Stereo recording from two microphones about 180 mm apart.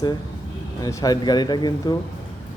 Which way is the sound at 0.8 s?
20° left (ahead or behind).